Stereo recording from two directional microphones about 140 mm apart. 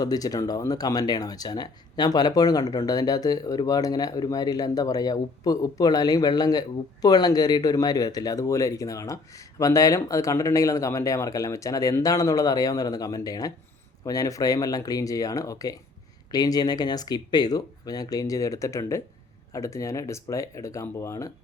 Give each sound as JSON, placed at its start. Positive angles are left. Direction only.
{"t": 0.0, "sound": "speech", "side_deg": 25}